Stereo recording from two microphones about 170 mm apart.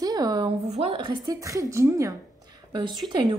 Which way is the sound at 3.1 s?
30° right (ahead or behind).